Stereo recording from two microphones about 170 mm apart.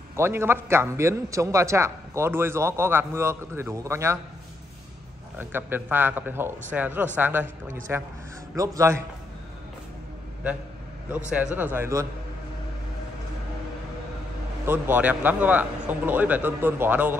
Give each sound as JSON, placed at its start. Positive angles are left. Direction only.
{"t": 0.1, "sound": "a man's voice", "side_deg": -15}
{"t": 5.4, "sound": "a man's voice", "side_deg": -10}
{"t": 11.1, "sound": "a man's voice", "side_deg": -10}
{"t": 14.7, "sound": "a man's voice", "side_deg": -10}